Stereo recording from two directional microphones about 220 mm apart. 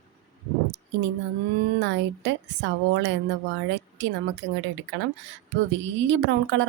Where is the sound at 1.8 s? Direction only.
55° right (ahead or behind).